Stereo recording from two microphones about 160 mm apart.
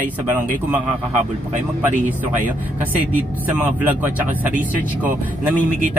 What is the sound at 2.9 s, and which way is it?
Speech, 10° right (ahead or behind).